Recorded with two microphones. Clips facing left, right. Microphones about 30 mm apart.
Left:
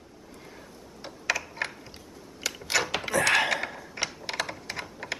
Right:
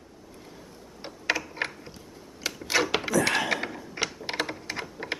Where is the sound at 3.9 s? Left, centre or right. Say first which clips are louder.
Right 2 dB; centre.